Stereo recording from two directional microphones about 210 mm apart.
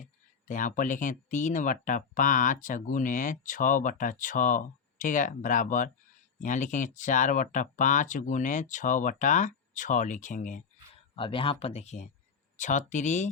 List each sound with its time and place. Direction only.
0.0 s speech: 35° left (ahead or behind)
11.1 s speech: 25° left (ahead or behind)